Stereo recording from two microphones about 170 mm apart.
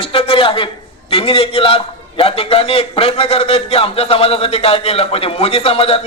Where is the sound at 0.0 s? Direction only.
30° left (ahead or behind).